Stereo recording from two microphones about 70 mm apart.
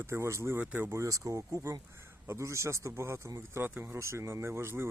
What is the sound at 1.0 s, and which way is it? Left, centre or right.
Speech, right.